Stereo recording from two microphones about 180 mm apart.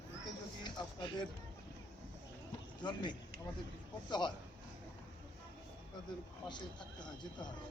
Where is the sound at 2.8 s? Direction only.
25° left (ahead or behind).